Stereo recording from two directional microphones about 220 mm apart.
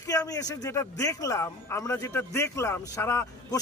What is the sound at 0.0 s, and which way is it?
A man's voice, 15° left (ahead or behind).